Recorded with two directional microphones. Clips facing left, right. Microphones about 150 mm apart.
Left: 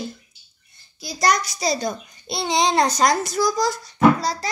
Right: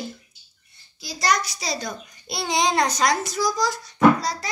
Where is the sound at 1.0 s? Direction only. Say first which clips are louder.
Left 3 dB; 45° left (ahead or behind).